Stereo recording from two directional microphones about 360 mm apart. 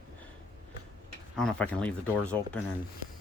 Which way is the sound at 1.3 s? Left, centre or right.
Centre.